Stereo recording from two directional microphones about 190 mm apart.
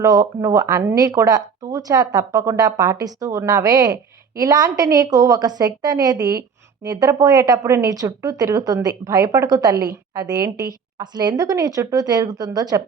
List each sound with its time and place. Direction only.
0.0 s speech: 20° right (ahead or behind)